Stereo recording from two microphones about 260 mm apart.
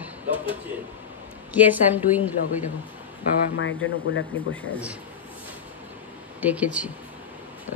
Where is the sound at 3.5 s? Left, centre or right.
Left.